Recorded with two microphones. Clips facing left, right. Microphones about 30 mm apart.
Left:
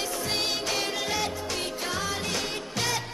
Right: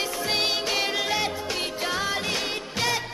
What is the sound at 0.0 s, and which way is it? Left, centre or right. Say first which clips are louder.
Music: right 3 dB; right.